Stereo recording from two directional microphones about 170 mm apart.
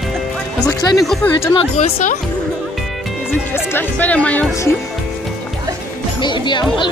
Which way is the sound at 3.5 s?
10° left (ahead or behind).